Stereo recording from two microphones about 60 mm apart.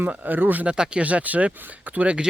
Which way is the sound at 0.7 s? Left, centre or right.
Centre.